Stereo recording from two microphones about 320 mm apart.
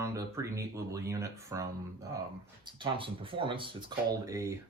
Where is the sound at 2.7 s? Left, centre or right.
Centre.